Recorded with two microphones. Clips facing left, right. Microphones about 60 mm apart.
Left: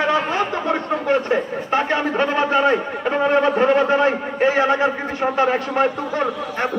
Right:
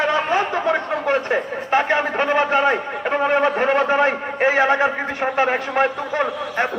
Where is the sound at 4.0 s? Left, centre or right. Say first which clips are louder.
Even; right.